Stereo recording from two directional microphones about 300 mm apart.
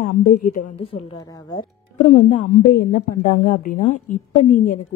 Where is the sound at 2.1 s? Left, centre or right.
Left.